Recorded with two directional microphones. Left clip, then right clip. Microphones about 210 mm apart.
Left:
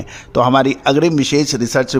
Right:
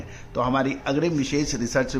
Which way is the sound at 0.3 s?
55° left (ahead or behind).